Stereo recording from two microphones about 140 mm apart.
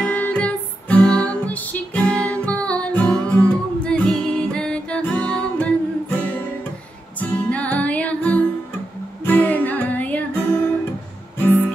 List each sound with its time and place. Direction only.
0.0 s music: 10° left (ahead or behind)